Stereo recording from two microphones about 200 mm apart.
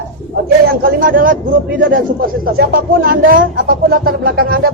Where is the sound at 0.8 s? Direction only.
45° right (ahead or behind).